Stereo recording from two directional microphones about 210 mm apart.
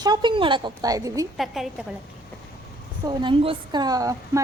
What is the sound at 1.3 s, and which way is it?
Speech, centre (ahead or behind).